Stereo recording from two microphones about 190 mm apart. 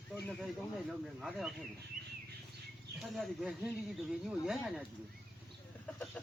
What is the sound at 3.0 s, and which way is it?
Speech, 5° right (ahead or behind).